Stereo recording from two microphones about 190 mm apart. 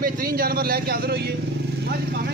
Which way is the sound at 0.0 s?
50° right (ahead or behind).